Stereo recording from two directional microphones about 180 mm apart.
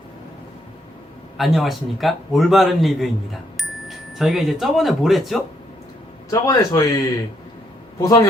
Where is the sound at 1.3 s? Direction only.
Centre (ahead or behind).